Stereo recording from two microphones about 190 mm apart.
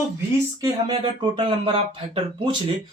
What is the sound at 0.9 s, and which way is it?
Speech, 25° right (ahead or behind).